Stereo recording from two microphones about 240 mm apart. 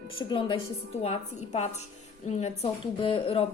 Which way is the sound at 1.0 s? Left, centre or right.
Left.